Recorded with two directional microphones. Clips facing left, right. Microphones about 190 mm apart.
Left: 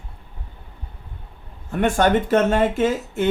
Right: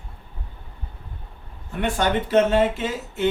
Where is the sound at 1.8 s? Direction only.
50° left (ahead or behind).